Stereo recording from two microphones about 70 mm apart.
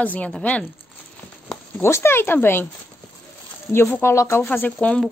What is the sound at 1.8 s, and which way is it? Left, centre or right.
Speech, left.